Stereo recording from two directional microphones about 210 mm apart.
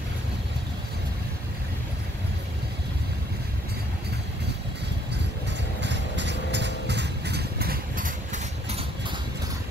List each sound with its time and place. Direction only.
5.8 s vehicle: 55° right (ahead or behind); by 8.8 s 30° right (ahead or behind)